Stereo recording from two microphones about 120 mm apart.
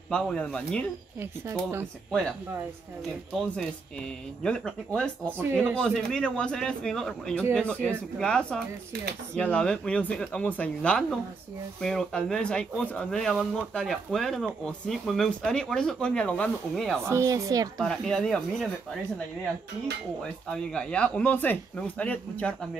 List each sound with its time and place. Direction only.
0.1 s speech: 5° left (ahead or behind)
1.2 s speech: 15° right (ahead or behind)
3.3 s speech: 5° left (ahead or behind)
17.0 s speech: 25° right (ahead or behind)
17.7 s speech: 5° left (ahead or behind)
20.4 s speech: 5° left (ahead or behind)